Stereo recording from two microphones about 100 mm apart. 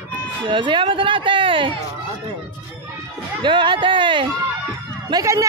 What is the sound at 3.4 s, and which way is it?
Speech, 55° right (ahead or behind).